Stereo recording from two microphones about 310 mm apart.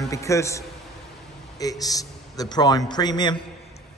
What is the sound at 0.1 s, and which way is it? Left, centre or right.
A man's voice, centre.